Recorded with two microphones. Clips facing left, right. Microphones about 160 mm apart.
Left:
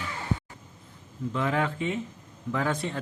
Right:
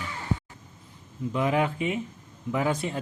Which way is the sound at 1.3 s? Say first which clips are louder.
Right 3 dB; 15° right (ahead or behind).